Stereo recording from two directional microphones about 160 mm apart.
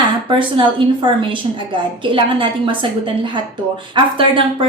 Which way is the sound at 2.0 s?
30° right (ahead or behind).